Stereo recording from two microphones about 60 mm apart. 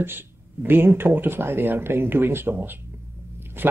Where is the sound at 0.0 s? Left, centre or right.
Right.